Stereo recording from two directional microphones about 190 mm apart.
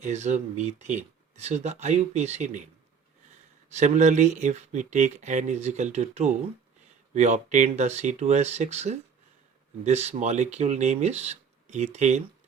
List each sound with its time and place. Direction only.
0.0 s speech: 35° right (ahead or behind)
3.7 s speech: 35° right (ahead or behind)